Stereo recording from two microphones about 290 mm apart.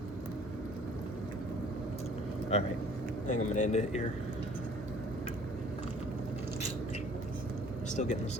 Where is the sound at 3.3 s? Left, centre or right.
Left.